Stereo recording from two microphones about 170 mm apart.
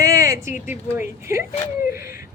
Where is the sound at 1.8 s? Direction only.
60° left (ahead or behind).